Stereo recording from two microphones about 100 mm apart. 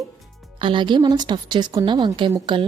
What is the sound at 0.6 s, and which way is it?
A woman's voice, 55° right (ahead or behind).